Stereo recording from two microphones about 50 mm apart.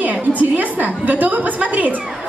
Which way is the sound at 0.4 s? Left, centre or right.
Right.